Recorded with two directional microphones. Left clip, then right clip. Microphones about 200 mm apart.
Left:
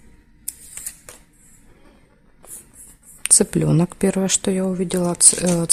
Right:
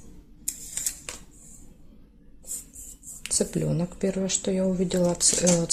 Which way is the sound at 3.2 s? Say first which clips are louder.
Left 8 dB; 45° left (ahead or behind).